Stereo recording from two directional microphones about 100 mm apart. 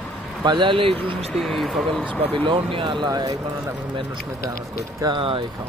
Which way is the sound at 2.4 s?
55° right (ahead or behind).